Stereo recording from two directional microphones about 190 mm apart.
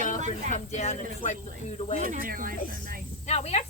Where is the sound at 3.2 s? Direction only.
35° left (ahead or behind).